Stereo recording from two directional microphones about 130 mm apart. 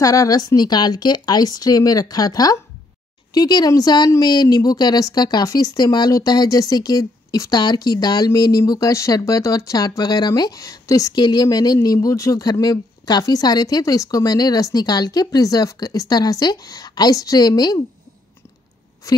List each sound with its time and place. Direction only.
0.0 s speech: 25° left (ahead or behind)
19.0 s a woman's voice: 25° left (ahead or behind)